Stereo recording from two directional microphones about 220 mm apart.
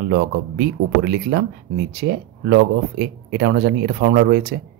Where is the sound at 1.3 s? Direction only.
45° right (ahead or behind).